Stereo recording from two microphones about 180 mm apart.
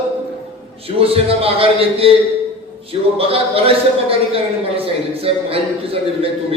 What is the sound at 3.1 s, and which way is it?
A man's voice, 30° right (ahead or behind).